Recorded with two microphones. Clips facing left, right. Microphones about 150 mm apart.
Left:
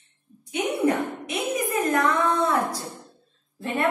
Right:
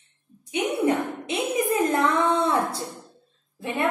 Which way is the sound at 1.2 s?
30° right (ahead or behind).